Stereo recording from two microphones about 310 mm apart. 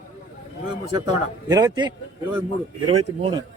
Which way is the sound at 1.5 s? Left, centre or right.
Centre.